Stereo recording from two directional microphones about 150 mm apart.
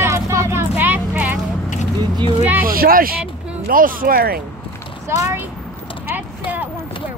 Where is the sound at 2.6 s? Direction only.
75° right (ahead or behind).